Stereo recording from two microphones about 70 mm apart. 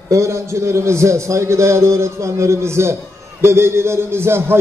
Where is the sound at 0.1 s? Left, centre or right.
Right.